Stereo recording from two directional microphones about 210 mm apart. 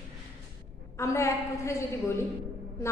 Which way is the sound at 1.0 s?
15° left (ahead or behind).